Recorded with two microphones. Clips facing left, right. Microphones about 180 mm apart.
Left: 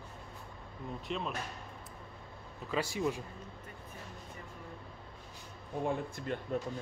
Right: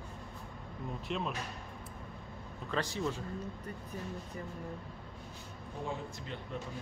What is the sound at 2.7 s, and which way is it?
Speech, 10° left (ahead or behind).